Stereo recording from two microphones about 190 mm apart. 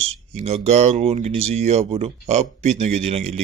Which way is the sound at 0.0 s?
35° right (ahead or behind).